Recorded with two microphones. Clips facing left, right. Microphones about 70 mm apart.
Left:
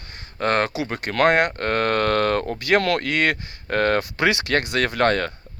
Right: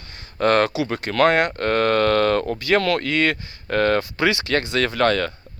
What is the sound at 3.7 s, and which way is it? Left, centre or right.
Speech, left.